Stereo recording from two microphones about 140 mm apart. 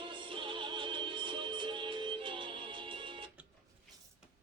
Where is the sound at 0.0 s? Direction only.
35° right (ahead or behind).